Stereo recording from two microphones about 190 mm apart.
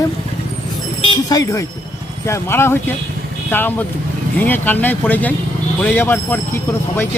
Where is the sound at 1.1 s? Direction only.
20° left (ahead or behind).